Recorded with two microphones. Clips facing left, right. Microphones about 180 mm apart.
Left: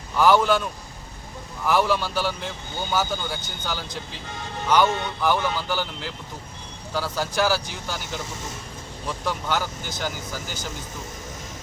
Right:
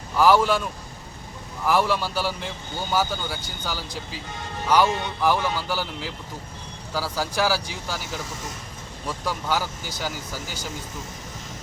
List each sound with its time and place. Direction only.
0.2 s speech: 5° right (ahead or behind)
9.2 s speech: 5° right (ahead or behind)